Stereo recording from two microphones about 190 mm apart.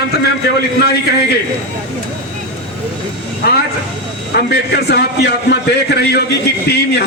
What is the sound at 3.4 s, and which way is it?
A man's voice, 55° left (ahead or behind).